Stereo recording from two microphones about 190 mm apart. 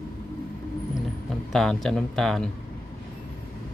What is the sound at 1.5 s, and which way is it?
Speech, centre (ahead or behind).